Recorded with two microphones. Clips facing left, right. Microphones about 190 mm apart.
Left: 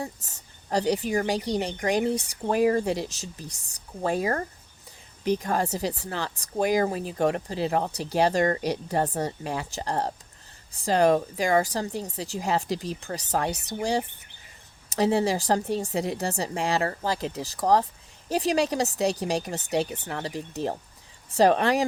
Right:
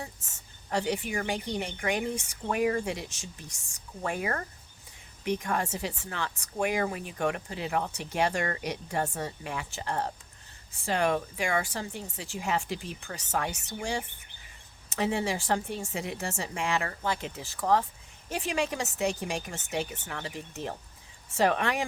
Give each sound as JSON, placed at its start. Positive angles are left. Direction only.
{"t": 0.0, "sound": "speech", "side_deg": 35}